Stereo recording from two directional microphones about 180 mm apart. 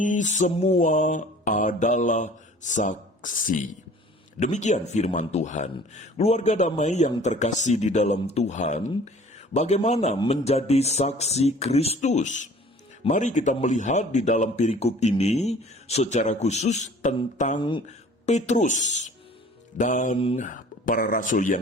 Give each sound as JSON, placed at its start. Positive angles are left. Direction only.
{"t": 0.0, "sound": "mantra", "side_deg": 45}
{"t": 4.4, "sound": "speech", "side_deg": 40}
{"t": 17.6, "sound": "speech", "side_deg": 25}
{"t": 17.8, "sound": "speech", "side_deg": 40}
{"t": 19.7, "sound": "mantra", "side_deg": 45}